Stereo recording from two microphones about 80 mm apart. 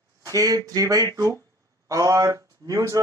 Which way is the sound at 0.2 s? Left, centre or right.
Right.